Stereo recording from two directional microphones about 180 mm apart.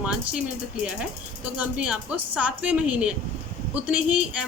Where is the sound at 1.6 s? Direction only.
5° right (ahead or behind).